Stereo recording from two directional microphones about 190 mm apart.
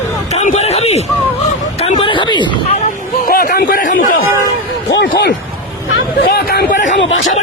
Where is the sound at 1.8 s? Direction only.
30° left (ahead or behind).